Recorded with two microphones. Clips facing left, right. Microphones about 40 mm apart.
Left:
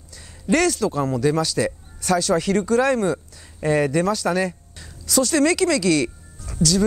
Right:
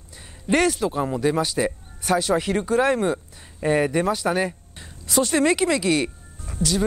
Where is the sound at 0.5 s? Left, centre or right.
Right.